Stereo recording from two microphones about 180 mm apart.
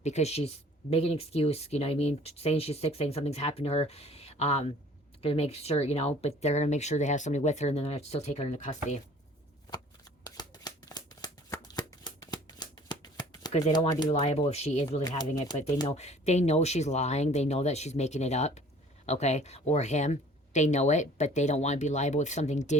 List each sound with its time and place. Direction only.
0.0 s speech: 40° left (ahead or behind)
10.2 s shuffling cards: 20° left (ahead or behind)
14.1 s speech: 35° left (ahead or behind)